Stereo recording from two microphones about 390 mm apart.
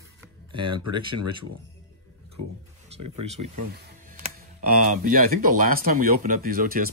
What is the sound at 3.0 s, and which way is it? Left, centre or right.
Speech, right.